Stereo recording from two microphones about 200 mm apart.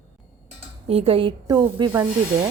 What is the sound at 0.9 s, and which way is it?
A woman's voice, 30° right (ahead or behind).